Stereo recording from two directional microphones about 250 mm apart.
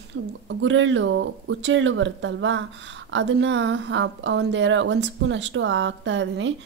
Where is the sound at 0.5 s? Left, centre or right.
Right.